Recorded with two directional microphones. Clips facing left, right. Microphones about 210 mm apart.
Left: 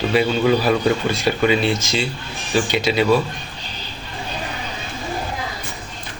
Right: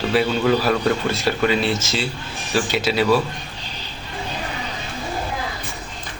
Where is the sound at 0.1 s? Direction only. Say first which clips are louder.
Left 1 dB; centre (ahead or behind).